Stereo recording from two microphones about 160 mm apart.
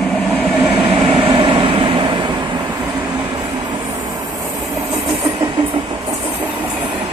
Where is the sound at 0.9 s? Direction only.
30° right (ahead or behind).